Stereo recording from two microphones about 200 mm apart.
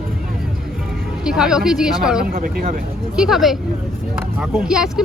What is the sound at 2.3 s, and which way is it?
Speech, 45° right (ahead or behind).